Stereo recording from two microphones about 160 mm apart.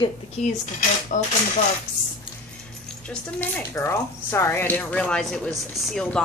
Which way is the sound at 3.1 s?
10° left (ahead or behind).